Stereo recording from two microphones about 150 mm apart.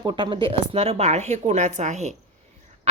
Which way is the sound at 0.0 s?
30° right (ahead or behind).